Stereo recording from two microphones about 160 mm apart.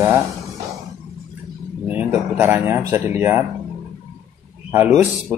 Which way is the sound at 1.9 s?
10° right (ahead or behind).